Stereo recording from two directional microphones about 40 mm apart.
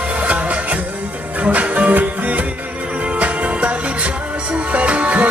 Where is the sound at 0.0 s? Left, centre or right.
Right.